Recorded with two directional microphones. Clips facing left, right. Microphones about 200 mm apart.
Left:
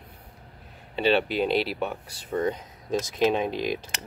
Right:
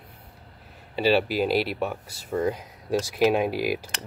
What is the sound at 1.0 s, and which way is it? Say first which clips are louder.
Speech: right 1 dB; 5° right (ahead or behind).